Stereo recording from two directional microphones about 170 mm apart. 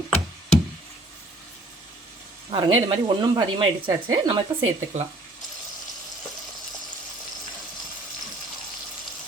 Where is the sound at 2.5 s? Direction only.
30° right (ahead or behind).